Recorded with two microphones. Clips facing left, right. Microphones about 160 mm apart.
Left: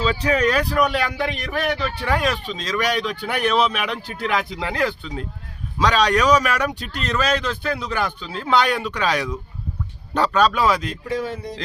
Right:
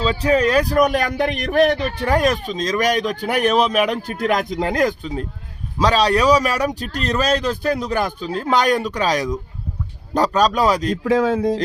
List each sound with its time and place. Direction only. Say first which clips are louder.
0.0 s a man's voice: right 3 dB; 35° right (ahead or behind)
10.9 s speech: right 9 dB; 90° right